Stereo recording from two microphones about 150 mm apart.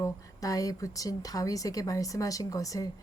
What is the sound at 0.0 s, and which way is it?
Speech, 25° left (ahead or behind).